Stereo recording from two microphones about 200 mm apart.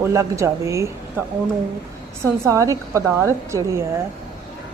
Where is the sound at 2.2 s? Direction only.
15° right (ahead or behind).